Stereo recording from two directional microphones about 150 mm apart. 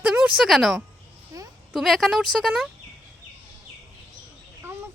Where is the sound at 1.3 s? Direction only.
20° right (ahead or behind).